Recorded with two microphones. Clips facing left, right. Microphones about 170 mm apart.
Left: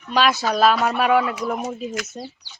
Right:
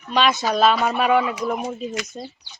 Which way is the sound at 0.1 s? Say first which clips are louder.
Even; centre (ahead or behind).